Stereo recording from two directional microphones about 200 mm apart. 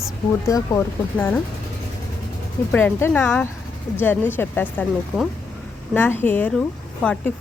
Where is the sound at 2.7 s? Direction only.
10° left (ahead or behind).